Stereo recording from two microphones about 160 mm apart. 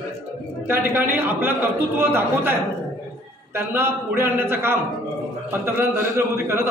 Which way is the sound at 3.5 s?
15° right (ahead or behind).